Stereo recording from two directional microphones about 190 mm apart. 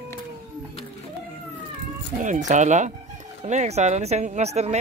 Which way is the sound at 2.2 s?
40° right (ahead or behind).